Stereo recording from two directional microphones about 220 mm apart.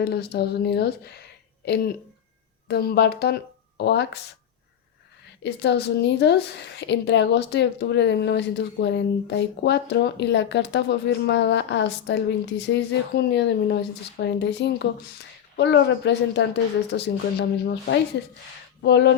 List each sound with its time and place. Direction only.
0.0 s a woman's voice: 45° left (ahead or behind)
5.4 s a woman's voice: 50° left (ahead or behind)